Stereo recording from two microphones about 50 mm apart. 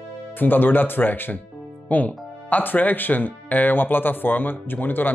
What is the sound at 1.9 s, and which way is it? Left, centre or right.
Speech, left.